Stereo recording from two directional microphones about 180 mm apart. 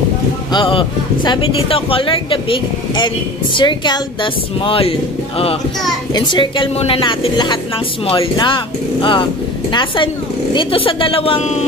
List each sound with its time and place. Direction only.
0.5 s speech: 30° left (ahead or behind)
6.1 s a woman's voice: 25° left (ahead or behind)